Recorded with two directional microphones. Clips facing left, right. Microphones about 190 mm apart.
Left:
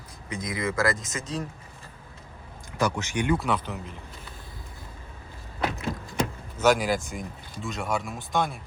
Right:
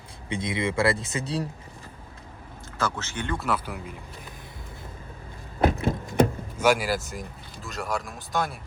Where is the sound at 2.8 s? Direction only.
15° left (ahead or behind).